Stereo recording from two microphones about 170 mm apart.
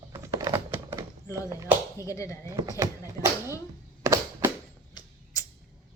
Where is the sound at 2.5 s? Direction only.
20° right (ahead or behind).